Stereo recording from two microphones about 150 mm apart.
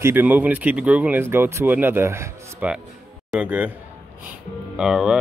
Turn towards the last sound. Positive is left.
turn(degrees=-5)  # may be behind; listen again after turning